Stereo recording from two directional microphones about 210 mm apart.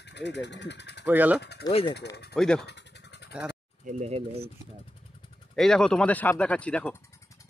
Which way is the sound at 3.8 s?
30° right (ahead or behind).